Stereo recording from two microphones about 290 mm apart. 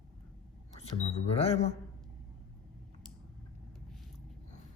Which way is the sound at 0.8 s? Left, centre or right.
Left.